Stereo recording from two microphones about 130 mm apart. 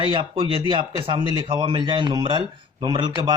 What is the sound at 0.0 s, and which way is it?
Speech, 40° right (ahead or behind).